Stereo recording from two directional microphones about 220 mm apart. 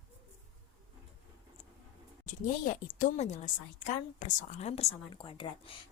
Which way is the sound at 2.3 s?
35° left (ahead or behind).